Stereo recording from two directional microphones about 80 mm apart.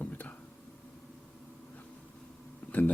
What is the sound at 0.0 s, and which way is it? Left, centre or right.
Whispering, left.